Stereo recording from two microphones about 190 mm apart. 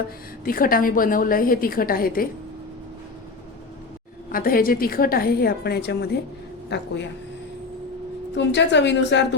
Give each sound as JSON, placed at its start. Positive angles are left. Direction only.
{"t": 0.4, "sound": "a woman's voice", "side_deg": 50}
{"t": 4.3, "sound": "a woman's voice", "side_deg": 50}
{"t": 8.4, "sound": "a woman's voice", "side_deg": 70}